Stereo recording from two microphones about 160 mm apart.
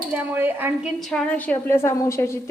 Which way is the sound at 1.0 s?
5° left (ahead or behind).